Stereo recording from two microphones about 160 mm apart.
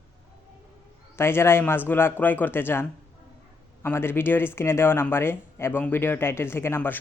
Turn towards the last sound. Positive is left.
turn(degrees=15)  # may be behind; listen again after turning